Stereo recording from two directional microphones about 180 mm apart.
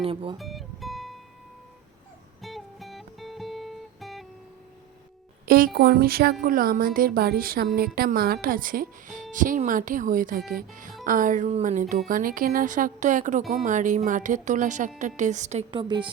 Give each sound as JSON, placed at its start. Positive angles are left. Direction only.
{"t": 0.0, "sound": "a woman's voice", "side_deg": -30}
{"t": 0.3, "sound": "music", "side_deg": 0}
{"t": 2.4, "sound": "music", "side_deg": 0}
{"t": 5.5, "sound": "a woman's voice", "side_deg": -55}